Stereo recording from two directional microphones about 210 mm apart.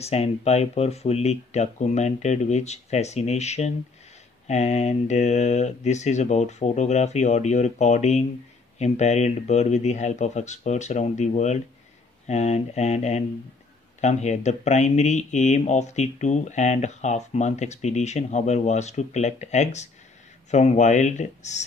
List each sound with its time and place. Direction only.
0.0 s speech: 30° left (ahead or behind)